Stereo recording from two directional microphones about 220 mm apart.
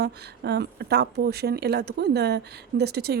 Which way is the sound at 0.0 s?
45° right (ahead or behind).